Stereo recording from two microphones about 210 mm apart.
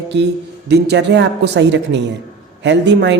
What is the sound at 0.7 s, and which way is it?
A woman's voice, 55° right (ahead or behind).